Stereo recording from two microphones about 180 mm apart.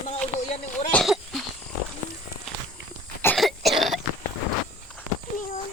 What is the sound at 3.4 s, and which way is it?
Cough, centre (ahead or behind).